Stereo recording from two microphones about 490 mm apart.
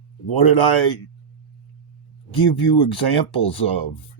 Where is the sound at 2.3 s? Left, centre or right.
Left.